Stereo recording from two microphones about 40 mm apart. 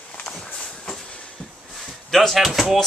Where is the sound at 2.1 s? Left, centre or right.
Centre.